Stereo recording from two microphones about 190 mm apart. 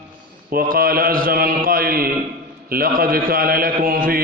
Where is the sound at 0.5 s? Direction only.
50° right (ahead or behind).